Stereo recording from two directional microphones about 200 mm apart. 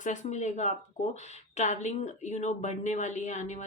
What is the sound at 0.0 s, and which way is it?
Speech, 40° left (ahead or behind).